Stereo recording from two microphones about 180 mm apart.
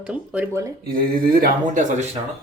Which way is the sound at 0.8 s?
55° right (ahead or behind).